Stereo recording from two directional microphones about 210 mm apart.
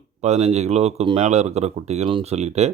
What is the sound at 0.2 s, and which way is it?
Speech, 30° right (ahead or behind).